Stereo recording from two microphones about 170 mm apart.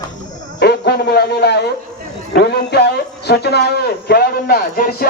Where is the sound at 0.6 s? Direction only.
75° left (ahead or behind).